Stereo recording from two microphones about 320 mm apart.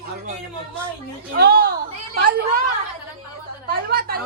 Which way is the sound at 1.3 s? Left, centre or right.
Right.